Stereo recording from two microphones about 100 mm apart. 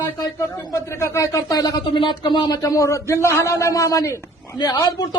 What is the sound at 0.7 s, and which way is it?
Speech, 30° left (ahead or behind).